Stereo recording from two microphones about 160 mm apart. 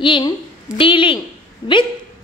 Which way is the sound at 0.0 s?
30° left (ahead or behind).